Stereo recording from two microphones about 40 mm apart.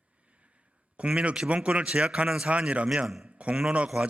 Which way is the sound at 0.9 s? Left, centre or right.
Right.